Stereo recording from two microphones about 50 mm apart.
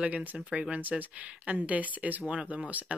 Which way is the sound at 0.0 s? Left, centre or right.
Right.